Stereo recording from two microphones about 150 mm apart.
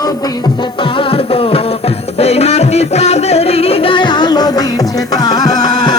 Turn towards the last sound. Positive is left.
turn(degrees=25)  # may be behind; listen again after turning